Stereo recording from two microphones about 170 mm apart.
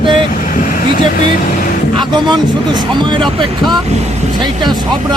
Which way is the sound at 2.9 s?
25° right (ahead or behind).